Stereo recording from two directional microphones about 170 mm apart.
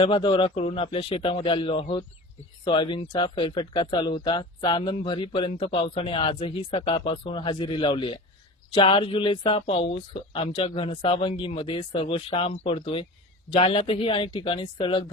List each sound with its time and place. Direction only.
0.0 s speech: 30° left (ahead or behind)